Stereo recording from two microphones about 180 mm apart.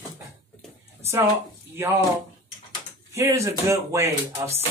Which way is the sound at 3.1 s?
15° right (ahead or behind).